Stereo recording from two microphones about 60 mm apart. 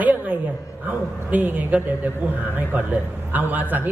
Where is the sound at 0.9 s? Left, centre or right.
Right.